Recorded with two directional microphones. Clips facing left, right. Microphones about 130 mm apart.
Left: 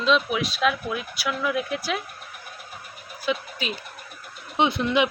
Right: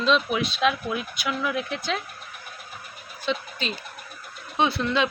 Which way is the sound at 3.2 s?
10° left (ahead or behind).